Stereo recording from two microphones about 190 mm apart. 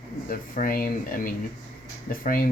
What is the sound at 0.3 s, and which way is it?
Speech, 45° left (ahead or behind).